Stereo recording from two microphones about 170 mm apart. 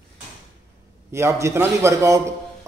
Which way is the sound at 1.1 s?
15° right (ahead or behind).